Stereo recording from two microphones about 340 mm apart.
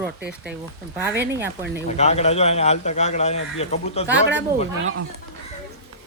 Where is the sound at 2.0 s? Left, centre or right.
Centre.